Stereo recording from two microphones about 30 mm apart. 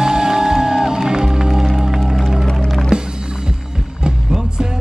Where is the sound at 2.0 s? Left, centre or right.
Centre.